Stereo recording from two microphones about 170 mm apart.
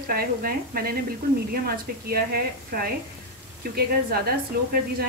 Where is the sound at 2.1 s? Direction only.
60° right (ahead or behind).